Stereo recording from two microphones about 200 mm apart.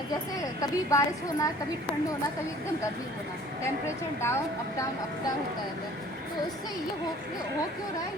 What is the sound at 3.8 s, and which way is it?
Speech, 15° left (ahead or behind).